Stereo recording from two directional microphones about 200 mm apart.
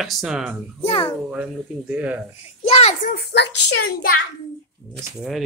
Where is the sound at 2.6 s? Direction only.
30° left (ahead or behind); by 3.7 s 55° left (ahead or behind).